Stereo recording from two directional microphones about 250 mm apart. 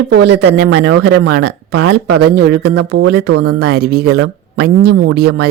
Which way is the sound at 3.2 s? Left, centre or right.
Right.